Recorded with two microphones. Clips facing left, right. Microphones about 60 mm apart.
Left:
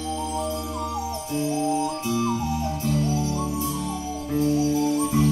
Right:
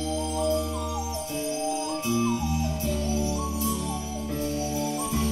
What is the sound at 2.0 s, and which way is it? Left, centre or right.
Music, centre.